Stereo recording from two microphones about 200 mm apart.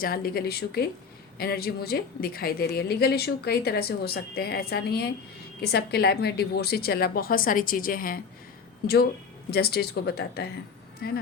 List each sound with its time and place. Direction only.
0.0 s a woman's voice: 50° left (ahead or behind)
9.5 s a woman's voice: 50° left (ahead or behind)